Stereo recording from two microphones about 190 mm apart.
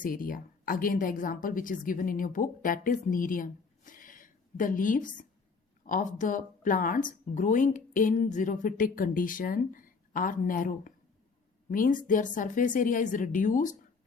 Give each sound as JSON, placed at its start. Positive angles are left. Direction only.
{"t": 0.0, "sound": "a woman's voice", "side_deg": 45}